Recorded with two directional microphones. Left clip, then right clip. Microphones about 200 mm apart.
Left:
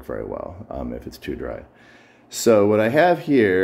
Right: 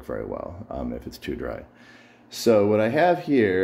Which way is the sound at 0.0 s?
Centre (ahead or behind).